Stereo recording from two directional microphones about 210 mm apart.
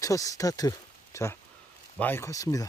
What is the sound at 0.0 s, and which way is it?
Speech, 15° left (ahead or behind).